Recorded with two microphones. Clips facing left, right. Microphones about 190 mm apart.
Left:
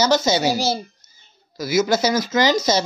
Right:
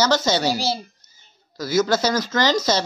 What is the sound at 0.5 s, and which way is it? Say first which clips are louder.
Speech: left 2 dB; 45° left (ahead or behind).